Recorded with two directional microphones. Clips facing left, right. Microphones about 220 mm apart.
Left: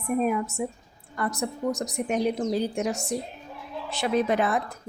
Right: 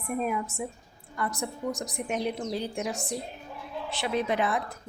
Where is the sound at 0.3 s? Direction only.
40° left (ahead or behind).